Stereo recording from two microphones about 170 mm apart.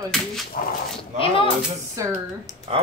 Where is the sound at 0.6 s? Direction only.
55° left (ahead or behind).